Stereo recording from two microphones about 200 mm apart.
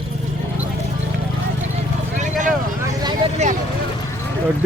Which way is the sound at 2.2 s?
40° right (ahead or behind).